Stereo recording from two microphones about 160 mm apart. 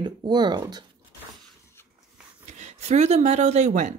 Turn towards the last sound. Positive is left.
turn(degrees=-45)  # may be behind; listen again after turning